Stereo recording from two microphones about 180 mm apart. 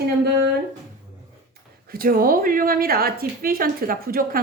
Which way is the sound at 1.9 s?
55° right (ahead or behind).